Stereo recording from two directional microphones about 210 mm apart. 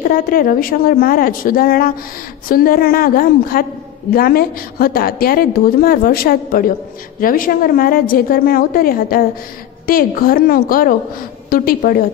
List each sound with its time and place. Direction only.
0.0 s a woman's voice: 45° left (ahead or behind)